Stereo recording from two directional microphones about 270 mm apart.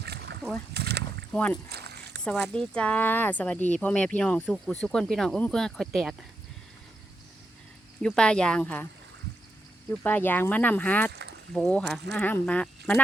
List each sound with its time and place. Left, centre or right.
0.0 s splash: right
0.7 s rowboat: right
1.3 s speech: centre
1.7 s a sound: right
2.2 s speech: centre
8.0 s speech: centre
9.9 s speech: centre
11.1 s rowboat: right
11.5 s speech: centre